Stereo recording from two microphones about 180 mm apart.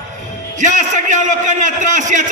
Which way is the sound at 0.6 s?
45° right (ahead or behind).